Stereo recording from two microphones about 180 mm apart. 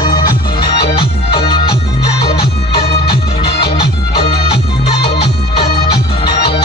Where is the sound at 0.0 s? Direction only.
25° left (ahead or behind).